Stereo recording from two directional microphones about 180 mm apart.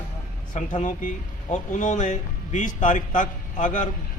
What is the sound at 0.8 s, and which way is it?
A man's voice, 40° left (ahead or behind).